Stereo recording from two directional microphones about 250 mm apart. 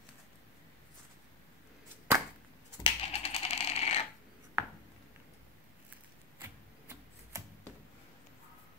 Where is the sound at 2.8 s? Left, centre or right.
Left.